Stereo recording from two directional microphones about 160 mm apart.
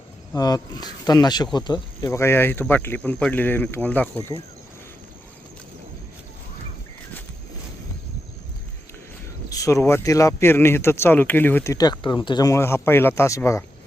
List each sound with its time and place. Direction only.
0.3 s speech: 25° left (ahead or behind)
9.5 s speech: 20° left (ahead or behind)